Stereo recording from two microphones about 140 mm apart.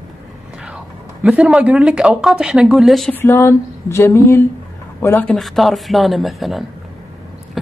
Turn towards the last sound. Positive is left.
turn(degrees=0)  # may be behind; listen again after turning